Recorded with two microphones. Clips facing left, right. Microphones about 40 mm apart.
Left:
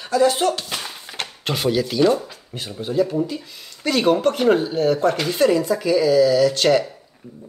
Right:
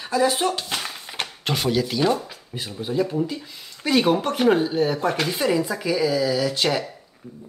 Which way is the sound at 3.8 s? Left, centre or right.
Centre.